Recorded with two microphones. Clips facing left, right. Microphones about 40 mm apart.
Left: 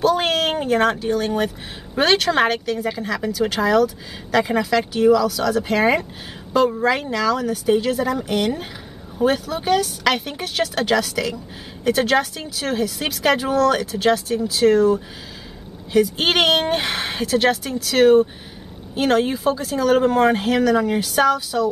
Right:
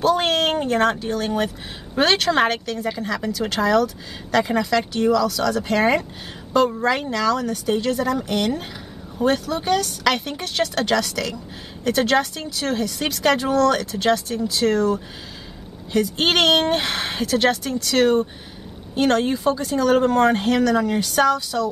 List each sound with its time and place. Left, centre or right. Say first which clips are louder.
0.0 s speech: even; centre